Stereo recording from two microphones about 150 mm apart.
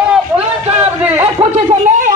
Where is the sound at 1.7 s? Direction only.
60° right (ahead or behind).